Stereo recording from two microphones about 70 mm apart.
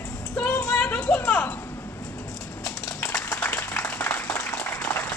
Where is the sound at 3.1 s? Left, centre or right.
Left.